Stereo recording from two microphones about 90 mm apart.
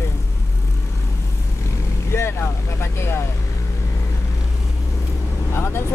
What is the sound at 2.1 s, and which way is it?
Vehicle, 30° left (ahead or behind).